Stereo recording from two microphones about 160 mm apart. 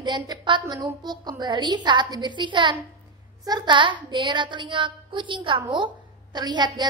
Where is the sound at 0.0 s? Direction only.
30° right (ahead or behind).